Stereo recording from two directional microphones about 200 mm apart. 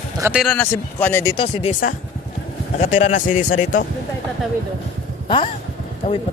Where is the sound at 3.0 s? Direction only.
40° left (ahead or behind).